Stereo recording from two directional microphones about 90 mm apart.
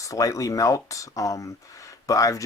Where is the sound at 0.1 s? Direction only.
40° left (ahead or behind).